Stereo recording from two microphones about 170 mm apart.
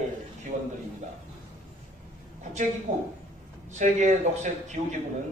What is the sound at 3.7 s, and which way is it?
A man's voice, 45° right (ahead or behind).